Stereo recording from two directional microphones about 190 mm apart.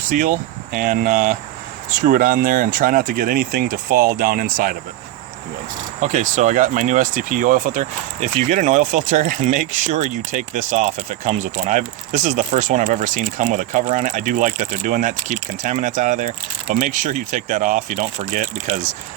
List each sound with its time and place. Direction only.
0.1 s speech: 45° right (ahead or behind)
6.0 s speech: 40° right (ahead or behind)